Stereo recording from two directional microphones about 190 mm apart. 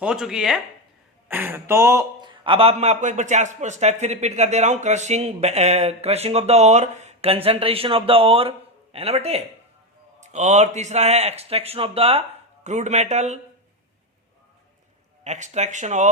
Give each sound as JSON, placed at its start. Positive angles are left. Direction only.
{"t": 0.0, "sound": "a man's voice", "side_deg": -5}
{"t": 15.2, "sound": "a man's voice", "side_deg": -35}